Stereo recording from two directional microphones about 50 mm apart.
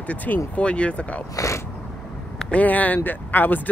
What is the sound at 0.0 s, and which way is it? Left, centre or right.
Speech, left.